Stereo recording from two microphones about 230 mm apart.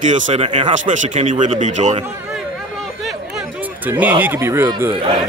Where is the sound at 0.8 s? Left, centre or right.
Right.